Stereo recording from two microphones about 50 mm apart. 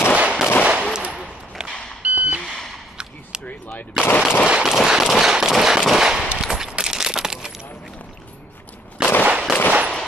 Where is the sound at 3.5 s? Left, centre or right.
Left.